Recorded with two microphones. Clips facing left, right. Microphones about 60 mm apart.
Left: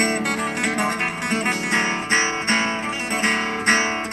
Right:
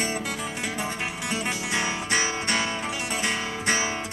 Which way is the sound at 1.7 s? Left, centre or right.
Left.